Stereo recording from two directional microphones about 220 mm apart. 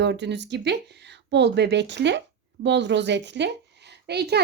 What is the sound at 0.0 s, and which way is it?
A woman's voice, 50° right (ahead or behind).